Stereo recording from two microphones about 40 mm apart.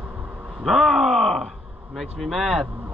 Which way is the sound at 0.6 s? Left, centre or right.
Centre.